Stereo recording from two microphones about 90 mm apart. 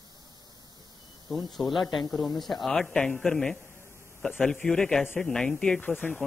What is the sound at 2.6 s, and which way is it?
A woman's voice, 5° left (ahead or behind).